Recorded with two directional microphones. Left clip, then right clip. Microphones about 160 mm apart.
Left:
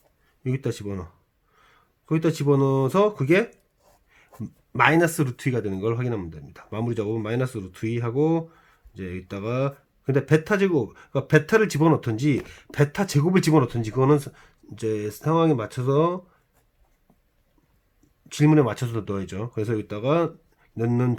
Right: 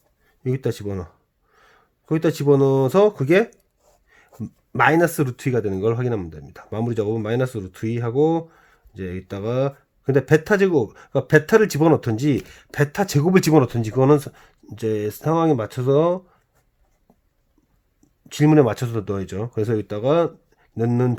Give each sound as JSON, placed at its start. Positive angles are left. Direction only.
{"t": 0.4, "sound": "speech", "side_deg": -35}
{"t": 4.7, "sound": "speech", "side_deg": -35}
{"t": 18.3, "sound": "speech", "side_deg": -40}